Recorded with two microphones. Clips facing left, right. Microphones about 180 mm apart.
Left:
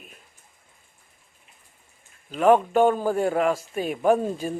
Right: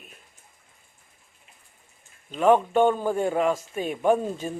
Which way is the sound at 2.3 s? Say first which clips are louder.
Left 1 dB; 5° left (ahead or behind).